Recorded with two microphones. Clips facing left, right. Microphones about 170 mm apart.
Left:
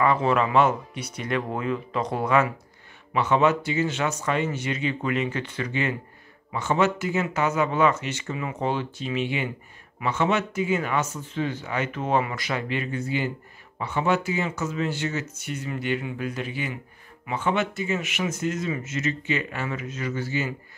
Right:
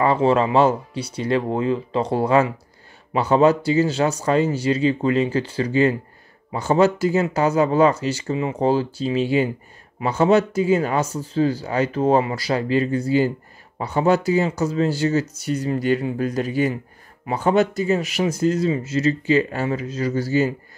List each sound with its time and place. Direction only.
0.0 s speech: 30° right (ahead or behind)